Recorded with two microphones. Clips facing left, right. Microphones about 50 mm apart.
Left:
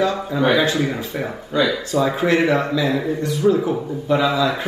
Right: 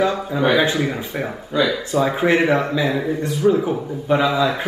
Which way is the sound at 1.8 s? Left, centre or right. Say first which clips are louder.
Even; centre.